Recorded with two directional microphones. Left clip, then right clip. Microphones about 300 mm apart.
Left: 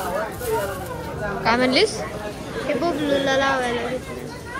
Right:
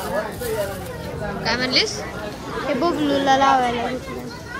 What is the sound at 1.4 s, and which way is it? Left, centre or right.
Speech, centre.